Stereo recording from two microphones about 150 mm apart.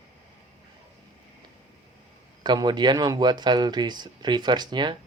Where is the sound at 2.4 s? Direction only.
30° right (ahead or behind).